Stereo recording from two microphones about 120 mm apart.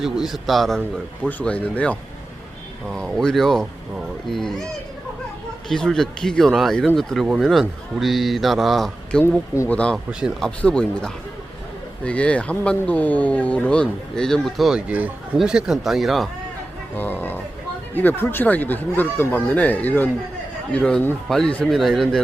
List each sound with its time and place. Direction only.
0.0 s a man's voice: centre (ahead or behind)
1.3 s a man's voice: 15° left (ahead or behind)
10.1 s speech: 5° right (ahead or behind)
10.4 s a man's voice: 10° left (ahead or behind)
17.0 s a man's voice: 15° left (ahead or behind)